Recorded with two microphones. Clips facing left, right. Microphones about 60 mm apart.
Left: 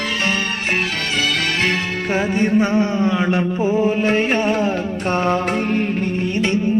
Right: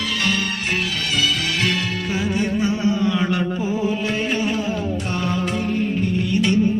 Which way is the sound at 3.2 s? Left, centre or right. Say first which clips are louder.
Left 3 dB; left.